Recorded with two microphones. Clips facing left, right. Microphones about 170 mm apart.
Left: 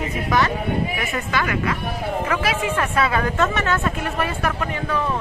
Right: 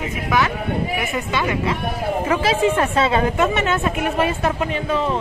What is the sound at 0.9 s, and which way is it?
A woman's voice, 20° right (ahead or behind).